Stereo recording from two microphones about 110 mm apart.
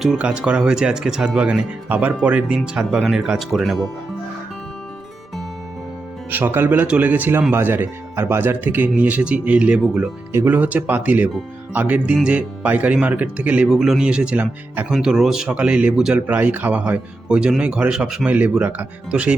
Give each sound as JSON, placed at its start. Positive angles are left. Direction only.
{"t": 0.0, "sound": "speech", "side_deg": -5}
{"t": 6.3, "sound": "speech", "side_deg": -15}
{"t": 10.3, "sound": "speech", "side_deg": -15}